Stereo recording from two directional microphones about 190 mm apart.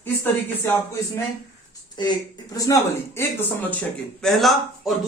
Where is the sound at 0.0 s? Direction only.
10° left (ahead or behind).